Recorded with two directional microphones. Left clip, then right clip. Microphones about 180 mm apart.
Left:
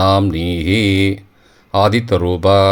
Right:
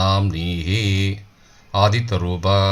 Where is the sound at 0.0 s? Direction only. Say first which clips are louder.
Left 7 dB; 50° left (ahead or behind).